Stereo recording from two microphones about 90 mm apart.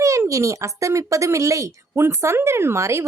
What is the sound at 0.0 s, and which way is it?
Speech, 40° right (ahead or behind).